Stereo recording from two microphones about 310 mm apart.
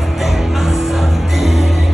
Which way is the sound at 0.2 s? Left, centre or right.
Centre.